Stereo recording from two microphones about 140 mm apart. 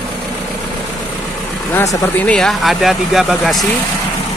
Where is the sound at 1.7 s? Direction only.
20° left (ahead or behind).